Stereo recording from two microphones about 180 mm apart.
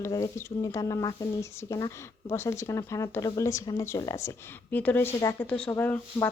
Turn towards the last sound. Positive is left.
turn(degrees=10)  # may be behind; listen again after turning